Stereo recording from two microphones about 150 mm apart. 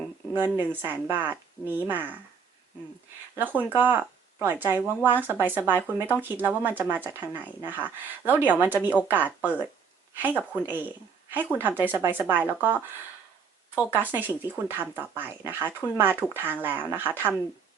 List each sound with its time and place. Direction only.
0.7 s speech: 15° right (ahead or behind)
3.3 s speech: 10° right (ahead or behind)
13.9 s speech: 15° right (ahead or behind)